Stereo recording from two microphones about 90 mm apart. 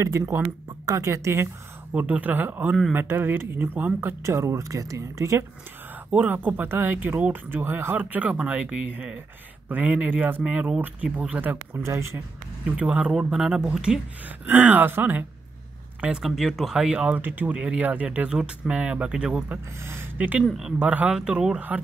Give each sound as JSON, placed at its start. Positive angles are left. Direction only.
{"t": 0.0, "sound": "speech", "side_deg": -40}
{"t": 2.0, "sound": "speech", "side_deg": -15}
{"t": 6.1, "sound": "speech", "side_deg": -20}
{"t": 11.8, "sound": "speech", "side_deg": -30}
{"t": 12.7, "sound": "speech", "side_deg": -10}
{"t": 16.0, "sound": "speech", "side_deg": -10}
{"t": 19.8, "sound": "speech", "side_deg": -30}
{"t": 20.2, "sound": "speech", "side_deg": -15}
{"t": 20.5, "sound": "speech", "side_deg": -5}